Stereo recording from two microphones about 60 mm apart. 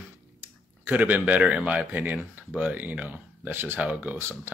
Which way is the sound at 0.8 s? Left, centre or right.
Right.